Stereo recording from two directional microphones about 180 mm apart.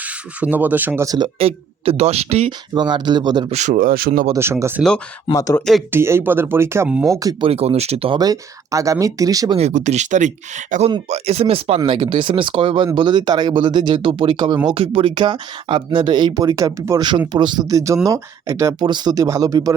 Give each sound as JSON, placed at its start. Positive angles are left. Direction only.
{"t": 0.0, "sound": "speech", "side_deg": -10}
{"t": 2.5, "sound": "speech", "side_deg": -25}
{"t": 3.5, "sound": "speech", "side_deg": -40}
{"t": 4.3, "sound": "speech", "side_deg": -15}
{"t": 4.8, "sound": "speech", "side_deg": -5}
{"t": 5.3, "sound": "speech", "side_deg": 15}
{"t": 5.9, "sound": "speech", "side_deg": -15}
{"t": 7.1, "sound": "speech", "side_deg": -20}
{"t": 7.4, "sound": "speech", "side_deg": -35}
{"t": 9.6, "sound": "speech", "side_deg": -40}